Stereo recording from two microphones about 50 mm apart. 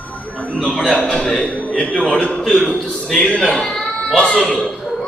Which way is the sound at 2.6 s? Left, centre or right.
Centre.